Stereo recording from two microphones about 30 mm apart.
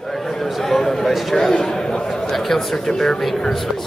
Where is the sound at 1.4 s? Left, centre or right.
Centre.